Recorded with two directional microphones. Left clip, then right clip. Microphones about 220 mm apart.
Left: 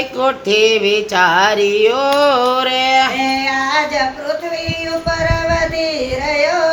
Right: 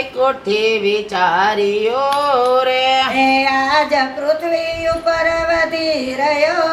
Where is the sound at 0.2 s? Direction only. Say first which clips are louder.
Left 2 dB; 35° left (ahead or behind).